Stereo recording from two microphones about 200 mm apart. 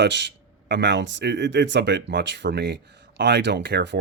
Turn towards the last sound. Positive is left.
turn(degrees=-55)  # may be behind; listen again after turning